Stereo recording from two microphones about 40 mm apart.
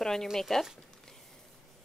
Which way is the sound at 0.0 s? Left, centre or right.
Centre.